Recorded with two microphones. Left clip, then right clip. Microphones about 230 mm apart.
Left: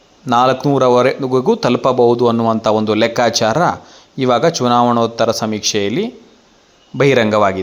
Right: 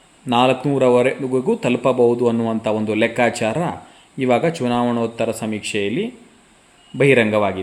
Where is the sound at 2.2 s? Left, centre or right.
Centre.